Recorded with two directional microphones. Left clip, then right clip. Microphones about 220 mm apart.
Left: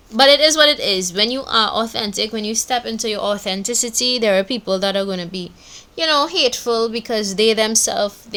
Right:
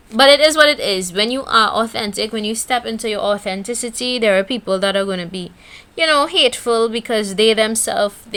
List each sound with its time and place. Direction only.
0.2 s speech: 15° right (ahead or behind)
6.0 s speech: 30° right (ahead or behind)